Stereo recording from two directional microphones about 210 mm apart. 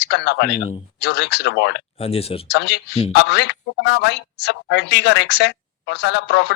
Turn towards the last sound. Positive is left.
turn(degrees=55)  # may be behind; listen again after turning